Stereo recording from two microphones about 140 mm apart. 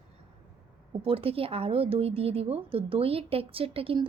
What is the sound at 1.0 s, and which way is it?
A woman's voice, 40° right (ahead or behind).